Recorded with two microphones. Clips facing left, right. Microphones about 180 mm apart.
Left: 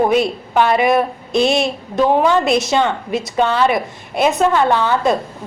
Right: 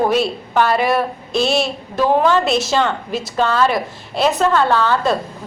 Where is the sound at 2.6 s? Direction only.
Centre (ahead or behind).